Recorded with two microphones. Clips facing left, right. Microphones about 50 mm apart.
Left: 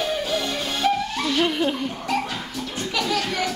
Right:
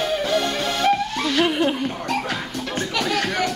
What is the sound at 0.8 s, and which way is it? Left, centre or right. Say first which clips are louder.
Music: right 2 dB; right.